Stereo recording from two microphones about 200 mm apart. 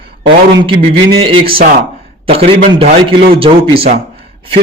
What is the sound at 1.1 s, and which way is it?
A man's voice, 25° right (ahead or behind).